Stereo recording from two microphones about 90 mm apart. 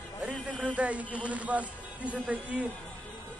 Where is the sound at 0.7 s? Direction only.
15° right (ahead or behind).